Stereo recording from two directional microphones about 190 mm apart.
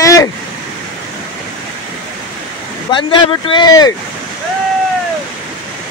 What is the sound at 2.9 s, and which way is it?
Speech, 25° left (ahead or behind).